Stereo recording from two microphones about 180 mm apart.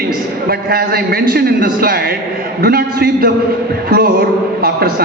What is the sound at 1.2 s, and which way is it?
A man's voice, 55° right (ahead or behind).